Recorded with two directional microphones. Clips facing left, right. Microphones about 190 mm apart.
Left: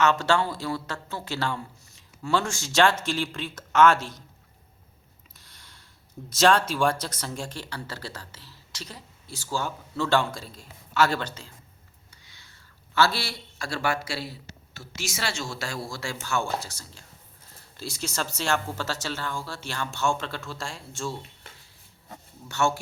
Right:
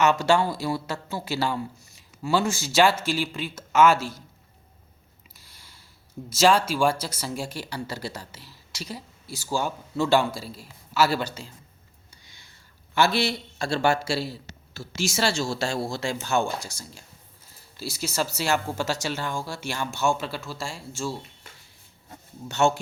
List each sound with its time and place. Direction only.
0.0 s speech: 10° right (ahead or behind)
5.4 s mechanisms: 5° right (ahead or behind)
6.3 s speech: 5° right (ahead or behind)
22.4 s speech: 20° right (ahead or behind)